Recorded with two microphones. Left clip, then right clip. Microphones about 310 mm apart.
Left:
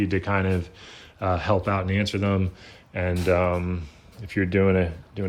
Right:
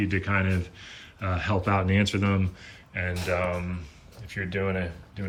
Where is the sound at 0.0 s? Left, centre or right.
Centre.